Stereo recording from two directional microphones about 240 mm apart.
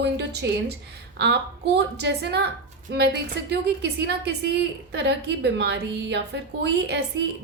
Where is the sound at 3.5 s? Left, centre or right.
Right.